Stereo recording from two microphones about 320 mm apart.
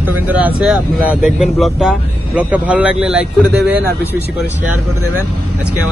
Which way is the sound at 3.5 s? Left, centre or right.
Right.